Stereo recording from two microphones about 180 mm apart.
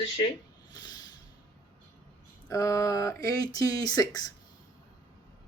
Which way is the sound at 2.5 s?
15° left (ahead or behind).